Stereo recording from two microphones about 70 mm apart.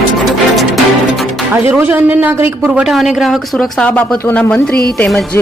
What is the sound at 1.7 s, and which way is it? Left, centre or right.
Speech, right.